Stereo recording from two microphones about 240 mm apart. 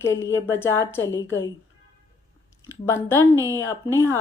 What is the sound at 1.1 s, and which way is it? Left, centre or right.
Speech, left.